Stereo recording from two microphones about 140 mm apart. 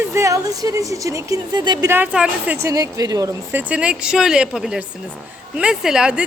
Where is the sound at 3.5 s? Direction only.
10° right (ahead or behind).